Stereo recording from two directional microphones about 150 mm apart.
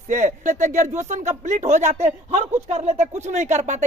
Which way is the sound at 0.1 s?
55° right (ahead or behind).